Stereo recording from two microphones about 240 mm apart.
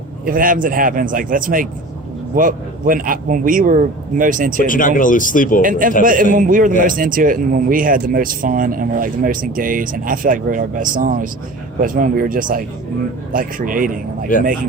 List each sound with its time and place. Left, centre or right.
0.3 s a man's voice: right
4.6 s speech: left
6.0 s a man's voice: right